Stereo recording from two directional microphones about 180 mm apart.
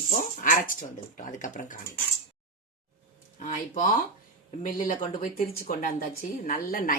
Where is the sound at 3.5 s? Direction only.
45° left (ahead or behind).